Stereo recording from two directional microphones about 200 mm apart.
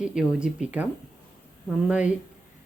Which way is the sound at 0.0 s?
5° right (ahead or behind).